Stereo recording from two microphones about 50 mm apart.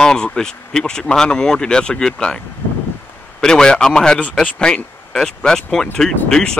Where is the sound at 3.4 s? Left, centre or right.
Centre.